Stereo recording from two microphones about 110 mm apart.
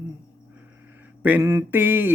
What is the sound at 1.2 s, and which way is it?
Mantra, 15° right (ahead or behind).